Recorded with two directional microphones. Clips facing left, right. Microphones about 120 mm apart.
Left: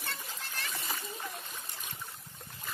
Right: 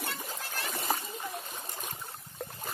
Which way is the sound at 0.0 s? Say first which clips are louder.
Right 4 dB; 50° right (ahead or behind).